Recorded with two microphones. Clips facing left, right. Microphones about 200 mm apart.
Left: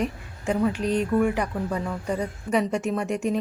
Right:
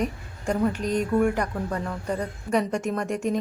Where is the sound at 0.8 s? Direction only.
35° left (ahead or behind).